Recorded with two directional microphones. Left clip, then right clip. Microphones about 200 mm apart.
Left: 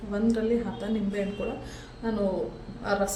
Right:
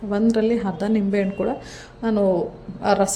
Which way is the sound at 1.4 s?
40° right (ahead or behind).